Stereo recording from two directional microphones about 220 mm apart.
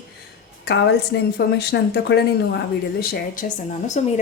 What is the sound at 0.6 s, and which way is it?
A woman's voice, 45° left (ahead or behind).